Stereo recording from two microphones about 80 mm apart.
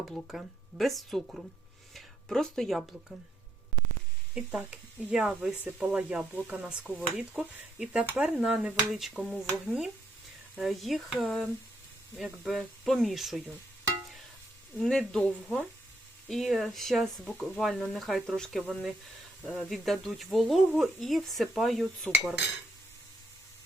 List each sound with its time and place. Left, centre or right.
0.3 s speech: centre
4.4 s speech: centre
8.0 s speech: right
8.9 s speech: centre
14.8 s speech: centre